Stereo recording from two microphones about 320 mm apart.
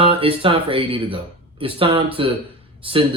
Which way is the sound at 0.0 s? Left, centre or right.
Centre.